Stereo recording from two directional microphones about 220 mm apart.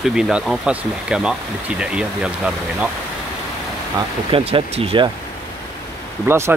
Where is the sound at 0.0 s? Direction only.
Centre (ahead or behind).